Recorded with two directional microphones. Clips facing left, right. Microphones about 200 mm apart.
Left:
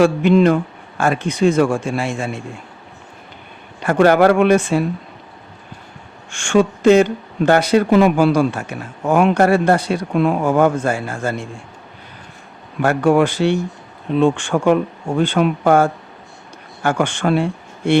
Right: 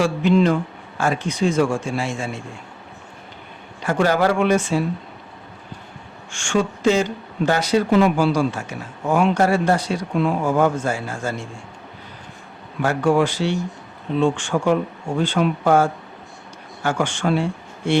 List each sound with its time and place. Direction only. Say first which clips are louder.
0.0 s speech: left 5 dB; 60° left (ahead or behind)
3.8 s speech: left 6 dB; 60° left (ahead or behind)
6.3 s speech: left 6 dB; 60° left (ahead or behind)
12.8 s speech: left 4 dB; 60° left (ahead or behind)